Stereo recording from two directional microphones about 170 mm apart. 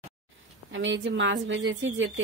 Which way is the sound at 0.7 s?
90° right.